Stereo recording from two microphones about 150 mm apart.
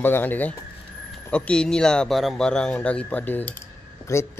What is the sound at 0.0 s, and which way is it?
Speech, 15° left (ahead or behind).